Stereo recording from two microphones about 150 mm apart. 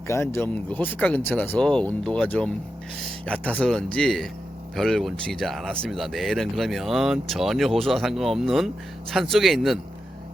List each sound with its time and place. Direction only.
0.1 s speech: 15° left (ahead or behind); by 9.8 s centre (ahead or behind)